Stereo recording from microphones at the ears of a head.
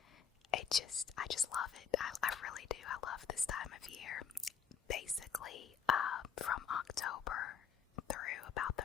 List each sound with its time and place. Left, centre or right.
0.5 s whispering: left